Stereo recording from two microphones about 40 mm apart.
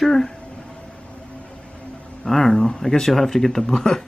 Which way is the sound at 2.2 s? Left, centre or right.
Centre.